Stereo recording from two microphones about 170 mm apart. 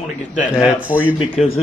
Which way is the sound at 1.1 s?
35° left (ahead or behind).